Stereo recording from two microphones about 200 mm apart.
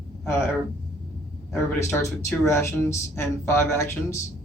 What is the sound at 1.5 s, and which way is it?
Speech, 10° left (ahead or behind).